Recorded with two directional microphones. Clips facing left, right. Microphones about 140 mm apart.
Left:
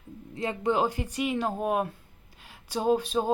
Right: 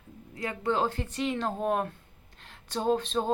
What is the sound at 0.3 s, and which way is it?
Speech, 20° left (ahead or behind).